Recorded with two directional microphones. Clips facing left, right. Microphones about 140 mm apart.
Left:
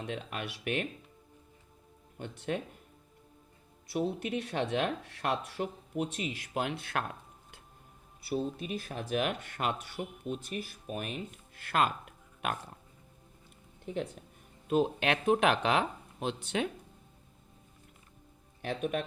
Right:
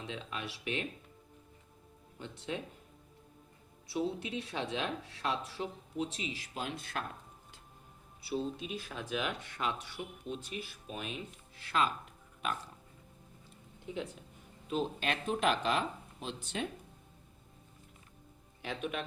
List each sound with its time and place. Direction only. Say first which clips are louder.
0.1 s speech: left 1 dB; 60° left (ahead or behind)
2.1 s speech: left 5 dB; 55° left (ahead or behind)
3.8 s speech: left 3 dB; 60° left (ahead or behind)
8.2 s speech: left 3 dB; 50° left (ahead or behind)
14.7 s speech: left 6 dB; 60° left (ahead or behind)
18.6 s speech: left 5 dB; 45° left (ahead or behind)